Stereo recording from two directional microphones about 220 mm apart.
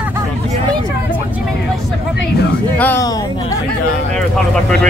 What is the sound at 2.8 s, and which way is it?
Speech, 10° left (ahead or behind).